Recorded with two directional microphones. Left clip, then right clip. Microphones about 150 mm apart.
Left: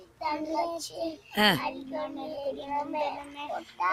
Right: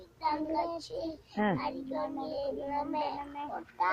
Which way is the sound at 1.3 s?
30° left (ahead or behind).